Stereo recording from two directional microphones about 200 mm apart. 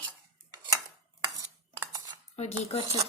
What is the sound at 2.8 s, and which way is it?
Speech, 20° right (ahead or behind).